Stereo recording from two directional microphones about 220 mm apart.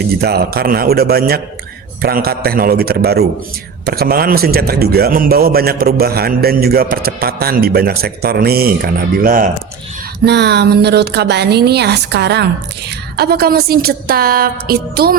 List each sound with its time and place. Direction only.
0.0 s a man's voice: 45° right (ahead or behind)